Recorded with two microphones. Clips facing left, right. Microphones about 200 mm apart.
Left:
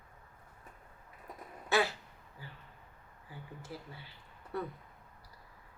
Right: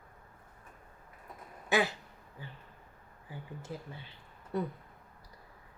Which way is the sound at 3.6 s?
20° right (ahead or behind).